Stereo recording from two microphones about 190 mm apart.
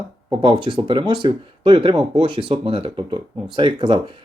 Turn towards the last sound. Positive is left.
turn(degrees=-25)  # may be behind; listen again after turning